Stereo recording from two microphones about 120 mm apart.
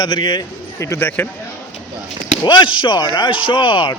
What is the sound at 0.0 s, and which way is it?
Speech, 35° left (ahead or behind).